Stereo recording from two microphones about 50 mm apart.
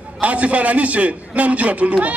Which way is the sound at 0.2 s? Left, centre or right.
Right.